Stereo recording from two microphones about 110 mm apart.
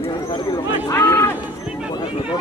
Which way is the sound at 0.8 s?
20° left (ahead or behind).